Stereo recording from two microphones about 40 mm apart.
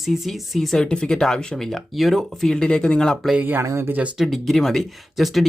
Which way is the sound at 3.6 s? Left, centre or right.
Right.